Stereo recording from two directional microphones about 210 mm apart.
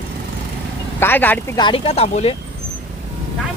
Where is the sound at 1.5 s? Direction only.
25° left (ahead or behind).